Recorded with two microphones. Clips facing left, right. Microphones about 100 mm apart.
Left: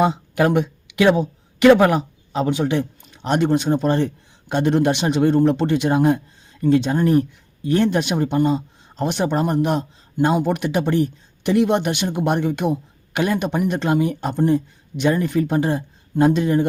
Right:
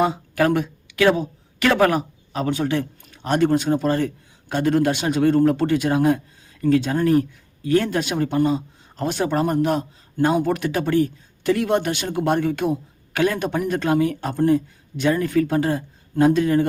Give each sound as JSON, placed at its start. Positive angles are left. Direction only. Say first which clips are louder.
{"t": 0.0, "sound": "speech", "louder": "left 2 dB", "side_deg": 20}